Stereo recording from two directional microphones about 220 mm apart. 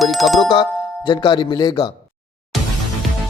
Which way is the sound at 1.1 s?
20° left (ahead or behind).